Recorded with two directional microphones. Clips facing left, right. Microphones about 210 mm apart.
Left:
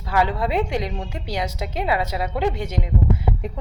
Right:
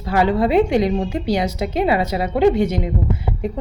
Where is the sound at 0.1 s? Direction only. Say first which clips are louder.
Right 6 dB; 30° right (ahead or behind).